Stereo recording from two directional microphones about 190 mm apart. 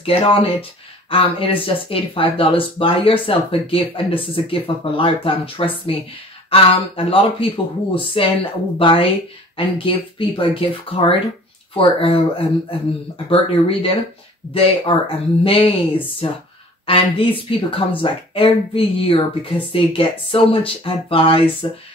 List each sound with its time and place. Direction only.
0.0 s speech: 30° left (ahead or behind)
16.8 s speech: 30° left (ahead or behind)